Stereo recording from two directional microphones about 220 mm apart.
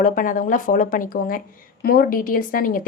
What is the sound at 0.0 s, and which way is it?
A woman's voice, 40° left (ahead or behind).